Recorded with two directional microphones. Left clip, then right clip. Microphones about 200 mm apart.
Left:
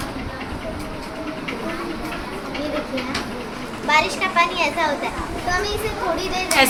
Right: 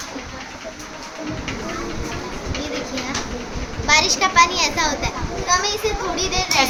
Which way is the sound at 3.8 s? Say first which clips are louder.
Right 2 dB; 50° right (ahead or behind).